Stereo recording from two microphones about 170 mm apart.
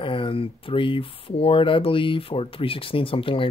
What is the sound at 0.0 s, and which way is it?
Speech, 30° left (ahead or behind).